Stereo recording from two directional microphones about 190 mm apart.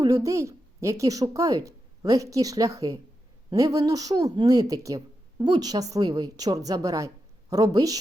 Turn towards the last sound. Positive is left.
turn(degrees=-20)  # may be behind; listen again after turning